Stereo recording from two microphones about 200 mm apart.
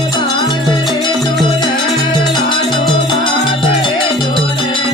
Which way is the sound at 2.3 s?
25° left (ahead or behind).